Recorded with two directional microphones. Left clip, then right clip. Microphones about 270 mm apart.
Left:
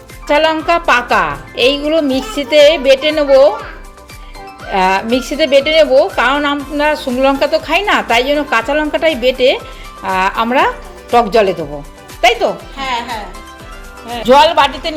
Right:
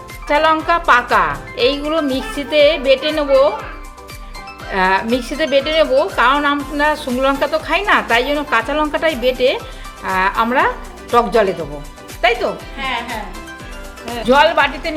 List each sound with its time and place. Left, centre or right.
0.3 s a woman's voice: centre
4.7 s a woman's voice: centre
12.7 s music: left
14.3 s a woman's voice: centre